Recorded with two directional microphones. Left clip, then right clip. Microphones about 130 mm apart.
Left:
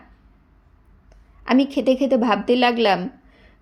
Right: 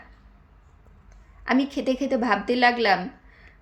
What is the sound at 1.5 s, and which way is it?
A woman's voice, 20° left (ahead or behind).